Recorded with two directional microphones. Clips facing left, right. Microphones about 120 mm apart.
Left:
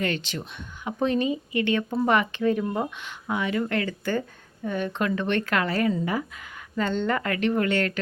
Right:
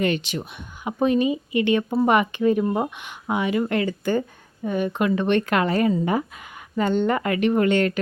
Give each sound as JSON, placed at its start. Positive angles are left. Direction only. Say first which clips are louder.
{"t": 0.0, "sound": "speech", "louder": "right 5 dB", "side_deg": -15}